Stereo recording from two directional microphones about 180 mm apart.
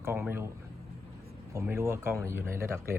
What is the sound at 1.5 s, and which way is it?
Speech, 15° right (ahead or behind).